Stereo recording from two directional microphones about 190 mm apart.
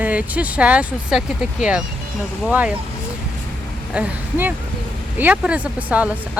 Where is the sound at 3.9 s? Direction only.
10° right (ahead or behind).